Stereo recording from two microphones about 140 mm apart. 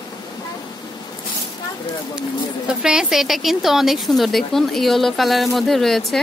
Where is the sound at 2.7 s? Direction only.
5° right (ahead or behind).